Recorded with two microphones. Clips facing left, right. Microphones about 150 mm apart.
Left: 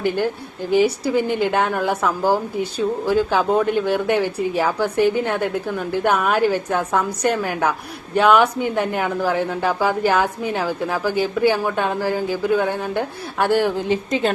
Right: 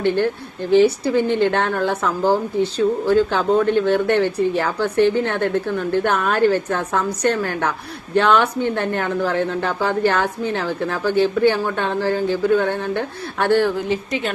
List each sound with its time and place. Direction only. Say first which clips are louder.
0.7 s a woman's voice: right 3 dB; 10° left (ahead or behind)